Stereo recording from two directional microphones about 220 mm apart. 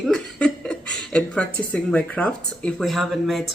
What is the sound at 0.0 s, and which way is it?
Speech, 5° left (ahead or behind).